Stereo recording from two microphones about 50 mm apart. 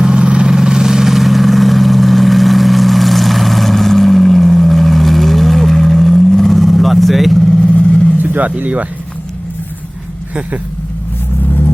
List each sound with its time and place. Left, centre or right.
0.0 s vehicle: centre
7.6 s vehicle: left
8.2 s speech: right